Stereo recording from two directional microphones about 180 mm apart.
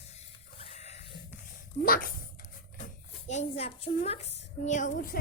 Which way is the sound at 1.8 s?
50° left (ahead or behind).